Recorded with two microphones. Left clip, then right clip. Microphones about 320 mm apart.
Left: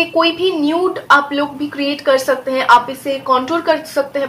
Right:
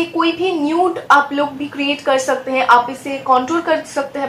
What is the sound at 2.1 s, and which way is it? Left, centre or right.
Speech, centre.